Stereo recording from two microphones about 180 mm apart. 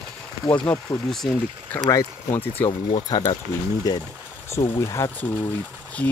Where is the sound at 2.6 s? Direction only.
30° left (ahead or behind).